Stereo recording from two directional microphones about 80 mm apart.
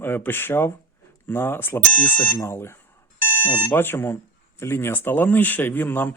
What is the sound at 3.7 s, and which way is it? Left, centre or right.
Speech, left.